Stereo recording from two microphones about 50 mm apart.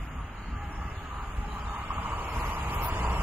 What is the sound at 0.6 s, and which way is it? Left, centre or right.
Vehicle, right.